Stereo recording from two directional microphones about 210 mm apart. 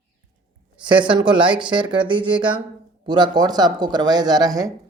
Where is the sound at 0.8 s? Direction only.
20° right (ahead or behind).